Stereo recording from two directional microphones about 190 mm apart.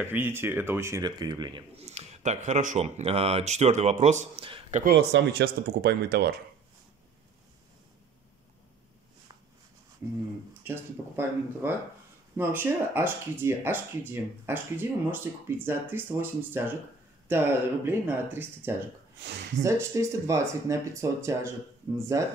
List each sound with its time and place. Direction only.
0.0 s speech: 10° right (ahead or behind); by 4.8 s 30° right (ahead or behind)
4.8 s speech: 60° right (ahead or behind)
10.6 s speech: 10° right (ahead or behind)